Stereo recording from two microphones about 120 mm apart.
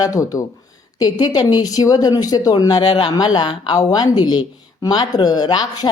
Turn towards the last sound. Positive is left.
turn(degrees=35)  # may be behind; listen again after turning